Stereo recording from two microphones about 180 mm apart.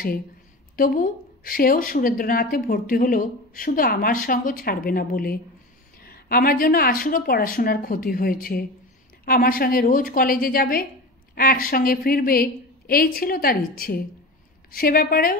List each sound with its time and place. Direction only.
0.7 s a woman's voice: 50° left (ahead or behind)